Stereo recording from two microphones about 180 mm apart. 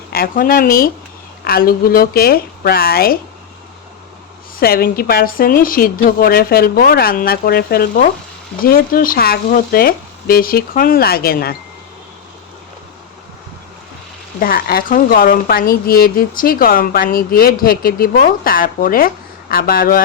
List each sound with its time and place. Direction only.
0.1 s a woman's voice: 55° left (ahead or behind)
4.6 s speech: 55° left (ahead or behind)
14.3 s speech: 55° left (ahead or behind)